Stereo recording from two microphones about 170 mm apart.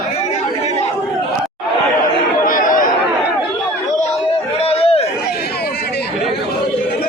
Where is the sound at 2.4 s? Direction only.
55° left (ahead or behind).